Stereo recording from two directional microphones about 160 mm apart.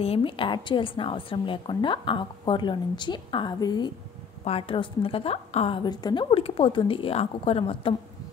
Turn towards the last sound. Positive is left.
turn(degrees=35)  # may be behind; listen again after turning